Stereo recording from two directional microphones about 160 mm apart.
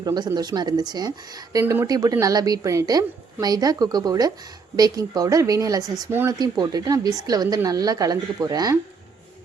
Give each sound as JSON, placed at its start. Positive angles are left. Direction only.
{"t": 0.0, "sound": "a woman's voice", "side_deg": -25}